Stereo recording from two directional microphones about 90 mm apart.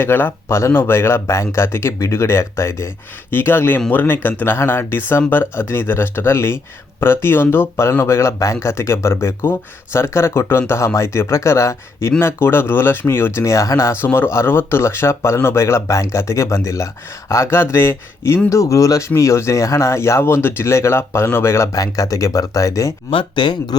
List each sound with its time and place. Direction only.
0.0 s speech: 25° left (ahead or behind)
3.8 s speech: 15° left (ahead or behind); by 23.0 s 40° left (ahead or behind)
23.0 s speech: 65° left (ahead or behind)